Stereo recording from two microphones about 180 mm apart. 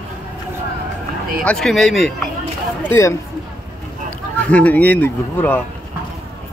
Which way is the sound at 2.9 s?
15° left (ahead or behind).